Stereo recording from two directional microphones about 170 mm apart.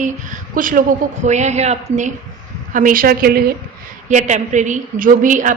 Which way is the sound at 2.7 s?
55° right (ahead or behind).